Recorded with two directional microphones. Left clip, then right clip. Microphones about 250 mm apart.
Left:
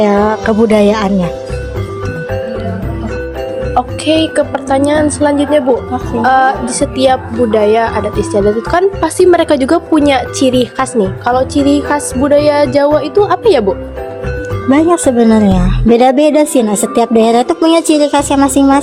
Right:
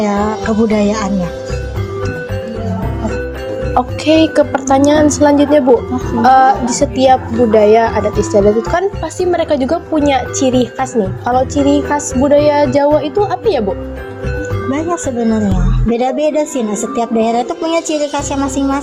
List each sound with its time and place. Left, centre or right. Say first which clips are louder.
0.0 s a woman's voice: left 5 dB; left
0.3 s a woman's voice: left 4 dB; centre
0.7 s a woman's voice: left 5 dB; left
3.8 s a woman's voice: right 1 dB; centre
8.7 s speech: left 5 dB; left
14.7 s a woman's voice: left 10 dB; left